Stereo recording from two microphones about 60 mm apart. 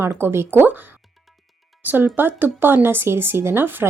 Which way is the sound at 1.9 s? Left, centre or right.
Right.